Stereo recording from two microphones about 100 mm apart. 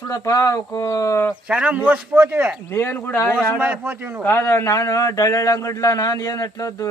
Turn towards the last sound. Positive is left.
turn(degrees=35)  # may be behind; listen again after turning